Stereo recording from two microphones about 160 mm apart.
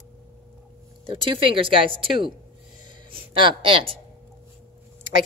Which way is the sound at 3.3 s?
30° right (ahead or behind).